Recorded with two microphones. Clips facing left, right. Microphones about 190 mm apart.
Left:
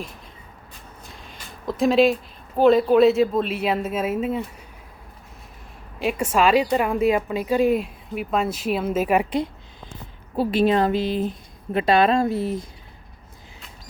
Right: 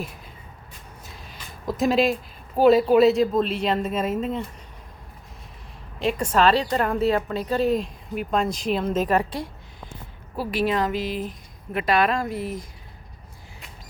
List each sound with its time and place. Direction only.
1.8 s speech: centre (ahead or behind)
6.0 s a woman's voice: 5° left (ahead or behind)
10.3 s speech: 25° left (ahead or behind)